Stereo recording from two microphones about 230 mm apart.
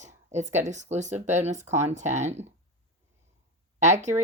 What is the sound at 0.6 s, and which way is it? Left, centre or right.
Speech, right.